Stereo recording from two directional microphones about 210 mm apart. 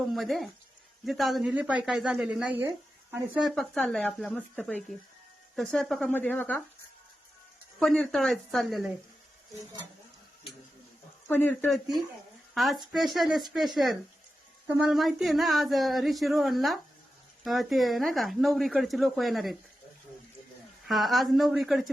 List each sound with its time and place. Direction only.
0.1 s speech: centre (ahead or behind)
7.8 s speech: centre (ahead or behind)
11.3 s speech: 10° left (ahead or behind)
14.8 s speech: centre (ahead or behind)
20.8 s speech: centre (ahead or behind)